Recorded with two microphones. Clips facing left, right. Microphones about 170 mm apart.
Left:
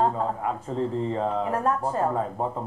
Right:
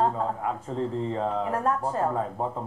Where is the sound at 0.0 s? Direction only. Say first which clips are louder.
Left 1 dB; 20° left (ahead or behind).